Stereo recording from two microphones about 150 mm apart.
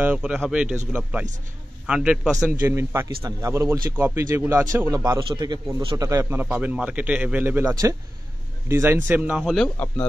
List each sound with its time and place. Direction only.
0.0 s speech: 5° right (ahead or behind)
1.9 s a man's voice: 5° right (ahead or behind)
2.6 s a man's voice: 20° right (ahead or behind)
5.9 s speech: 20° right (ahead or behind); by 9.7 s centre (ahead or behind)